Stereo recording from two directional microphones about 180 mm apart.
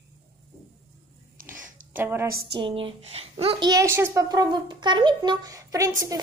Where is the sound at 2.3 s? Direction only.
55° right (ahead or behind).